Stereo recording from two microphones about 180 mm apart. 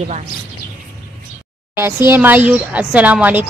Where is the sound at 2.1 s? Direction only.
10° right (ahead or behind).